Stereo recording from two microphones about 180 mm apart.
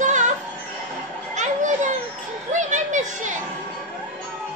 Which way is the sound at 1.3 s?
40° right (ahead or behind).